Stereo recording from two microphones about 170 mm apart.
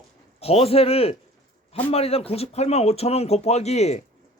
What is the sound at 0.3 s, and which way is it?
Speech, 35° left (ahead or behind).